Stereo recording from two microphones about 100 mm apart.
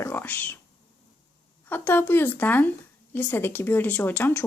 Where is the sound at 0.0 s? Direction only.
20° left (ahead or behind).